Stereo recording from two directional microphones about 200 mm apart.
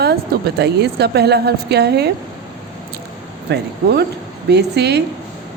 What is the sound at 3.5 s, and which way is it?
A woman's voice, 55° right (ahead or behind).